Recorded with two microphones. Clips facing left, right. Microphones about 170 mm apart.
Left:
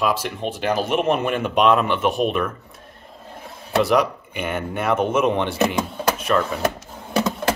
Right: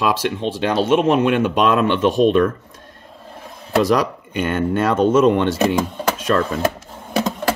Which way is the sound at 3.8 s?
90° right.